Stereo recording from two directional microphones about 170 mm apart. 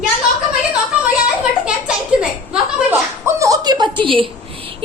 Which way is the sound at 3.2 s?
15° right (ahead or behind).